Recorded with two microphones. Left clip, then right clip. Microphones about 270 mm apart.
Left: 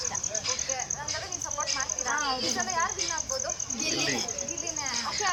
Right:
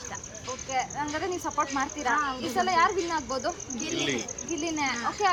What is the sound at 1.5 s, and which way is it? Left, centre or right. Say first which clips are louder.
A child's voice: even; right.